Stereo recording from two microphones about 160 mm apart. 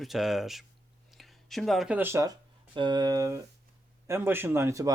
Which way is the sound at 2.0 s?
15° right (ahead or behind).